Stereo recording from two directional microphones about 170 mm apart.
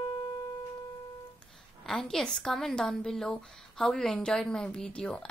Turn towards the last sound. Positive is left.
turn(degrees=5)  # may be behind; listen again after turning